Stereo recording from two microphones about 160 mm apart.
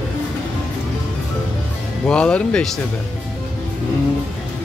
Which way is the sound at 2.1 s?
5° left (ahead or behind).